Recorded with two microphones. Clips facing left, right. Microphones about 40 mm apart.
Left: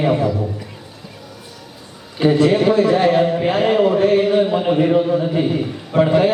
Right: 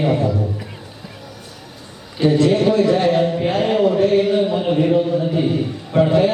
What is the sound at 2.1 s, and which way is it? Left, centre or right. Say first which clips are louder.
A man's voice: left 1 dB; centre.